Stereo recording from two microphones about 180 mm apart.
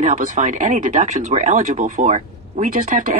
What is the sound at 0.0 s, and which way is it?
Speech, 45° right (ahead or behind).